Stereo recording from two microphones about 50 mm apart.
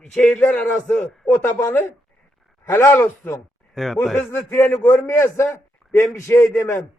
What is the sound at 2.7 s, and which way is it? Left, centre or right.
Speech, left.